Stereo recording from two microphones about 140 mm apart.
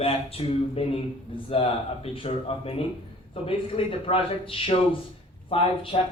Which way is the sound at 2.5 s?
45° left (ahead or behind).